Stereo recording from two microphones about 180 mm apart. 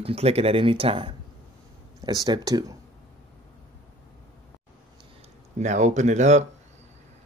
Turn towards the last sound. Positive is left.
turn(degrees=-40)  # may be behind; listen again after turning